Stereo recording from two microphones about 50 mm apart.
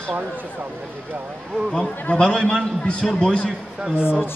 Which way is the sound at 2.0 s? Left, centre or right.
Left.